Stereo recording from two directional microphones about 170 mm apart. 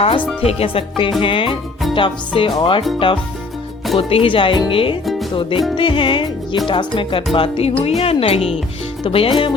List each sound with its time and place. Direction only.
0.4 s speech: 35° left (ahead or behind)
2.0 s music: 30° left (ahead or behind)
3.9 s speech: 35° left (ahead or behind)
5.7 s music: 30° left (ahead or behind)
7.3 s speech: 30° left (ahead or behind)